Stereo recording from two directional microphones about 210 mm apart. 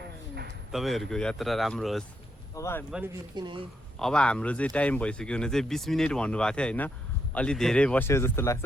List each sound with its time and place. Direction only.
0.7 s speech: centre (ahead or behind)
2.6 s speech: 15° left (ahead or behind)
2.9 s speech: 10° right (ahead or behind)
3.9 s speech: 5° left (ahead or behind)